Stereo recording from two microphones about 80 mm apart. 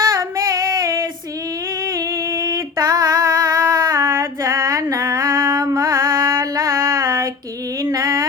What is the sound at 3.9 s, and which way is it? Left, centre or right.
Female singing, right.